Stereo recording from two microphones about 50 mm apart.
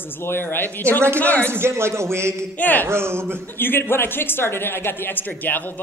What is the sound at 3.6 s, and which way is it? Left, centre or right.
A man's voice, left.